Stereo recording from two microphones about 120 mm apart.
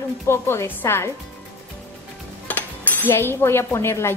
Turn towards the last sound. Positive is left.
turn(degrees=20)  # may be behind; listen again after turning